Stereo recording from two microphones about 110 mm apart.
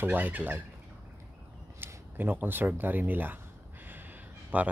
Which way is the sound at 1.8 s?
15° right (ahead or behind).